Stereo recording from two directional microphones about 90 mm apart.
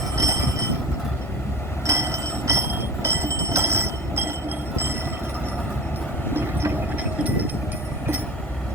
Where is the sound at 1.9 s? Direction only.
35° right (ahead or behind).